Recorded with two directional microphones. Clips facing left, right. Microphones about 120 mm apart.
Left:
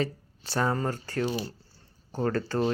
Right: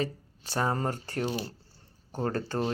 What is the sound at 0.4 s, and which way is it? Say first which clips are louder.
Speech: left 2 dB; 15° right (ahead or behind).